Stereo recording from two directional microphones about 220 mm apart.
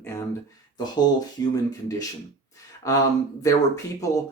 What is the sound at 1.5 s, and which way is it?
Speech, 15° left (ahead or behind).